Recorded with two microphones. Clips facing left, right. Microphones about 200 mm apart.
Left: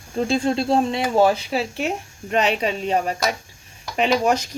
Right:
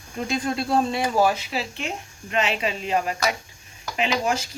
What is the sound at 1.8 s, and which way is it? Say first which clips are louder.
Speech: left 7 dB; 45° left (ahead or behind).